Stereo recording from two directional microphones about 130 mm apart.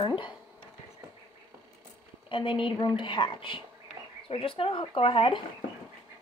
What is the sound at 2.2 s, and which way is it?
A woman's voice, 40° left (ahead or behind).